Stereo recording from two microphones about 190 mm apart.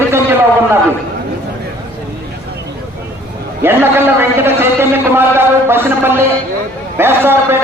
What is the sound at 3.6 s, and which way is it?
A man's voice, 10° right (ahead or behind).